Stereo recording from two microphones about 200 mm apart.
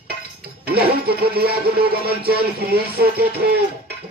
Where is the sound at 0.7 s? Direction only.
50° right (ahead or behind).